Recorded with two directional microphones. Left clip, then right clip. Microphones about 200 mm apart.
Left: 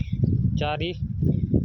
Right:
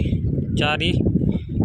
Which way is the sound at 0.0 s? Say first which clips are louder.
Right 4 dB; 5° left (ahead or behind).